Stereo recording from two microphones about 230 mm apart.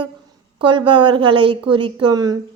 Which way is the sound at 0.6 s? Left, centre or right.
Right.